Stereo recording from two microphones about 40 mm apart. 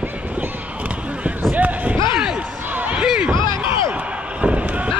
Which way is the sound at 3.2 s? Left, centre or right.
Right.